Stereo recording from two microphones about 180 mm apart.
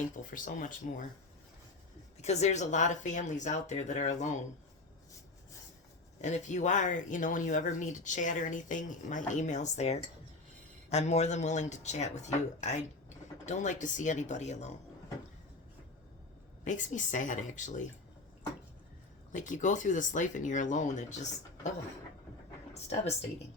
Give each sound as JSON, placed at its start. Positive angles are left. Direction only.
{"t": 0.2, "sound": "speech", "side_deg": 45}
{"t": 2.2, "sound": "speech", "side_deg": 40}
{"t": 6.2, "sound": "speech", "side_deg": 40}
{"t": 16.6, "sound": "speech", "side_deg": 45}
{"t": 19.3, "sound": "speech", "side_deg": 45}
{"t": 22.7, "sound": "speech", "side_deg": 35}